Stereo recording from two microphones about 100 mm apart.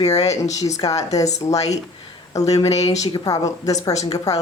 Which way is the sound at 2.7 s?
90° left.